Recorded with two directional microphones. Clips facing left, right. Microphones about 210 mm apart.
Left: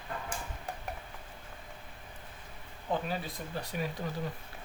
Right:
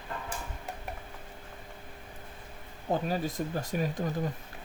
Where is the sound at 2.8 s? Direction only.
40° right (ahead or behind).